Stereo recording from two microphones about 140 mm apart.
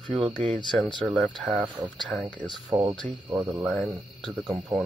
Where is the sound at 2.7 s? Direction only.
25° right (ahead or behind).